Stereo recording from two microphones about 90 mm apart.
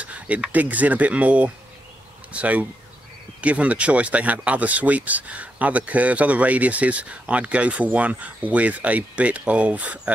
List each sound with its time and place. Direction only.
0.0 s speech: 15° right (ahead or behind)